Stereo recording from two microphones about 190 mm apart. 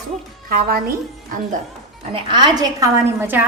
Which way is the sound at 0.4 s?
50° right (ahead or behind).